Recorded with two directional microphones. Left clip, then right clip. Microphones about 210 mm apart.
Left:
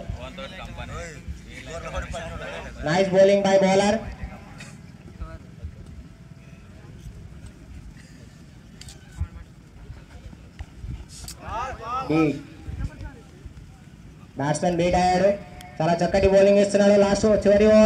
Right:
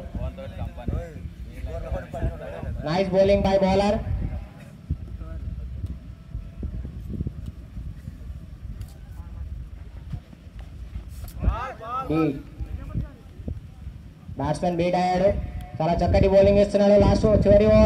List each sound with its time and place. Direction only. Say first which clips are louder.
0.2 s a sound: left 3 dB; 35° right (ahead or behind)
1.7 s a man's voice: left 1 dB; 35° right (ahead or behind)
2.8 s speech: left 3 dB; 30° left (ahead or behind)
11.5 s vehicle: left 2 dB; 20° left (ahead or behind)
14.3 s speech: left 2 dB; 30° left (ahead or behind)